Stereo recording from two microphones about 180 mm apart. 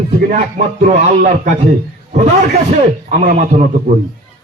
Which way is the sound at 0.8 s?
40° right (ahead or behind).